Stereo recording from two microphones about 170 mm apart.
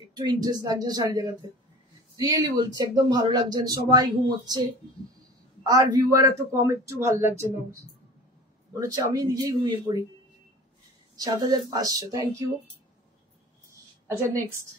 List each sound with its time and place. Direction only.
0.1 s a man's voice: 25° right (ahead or behind)
8.7 s speech: 20° right (ahead or behind)
11.1 s speech: 25° right (ahead or behind)